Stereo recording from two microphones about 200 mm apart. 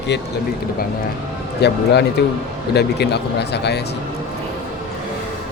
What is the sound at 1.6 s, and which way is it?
A man's voice, 55° left (ahead or behind).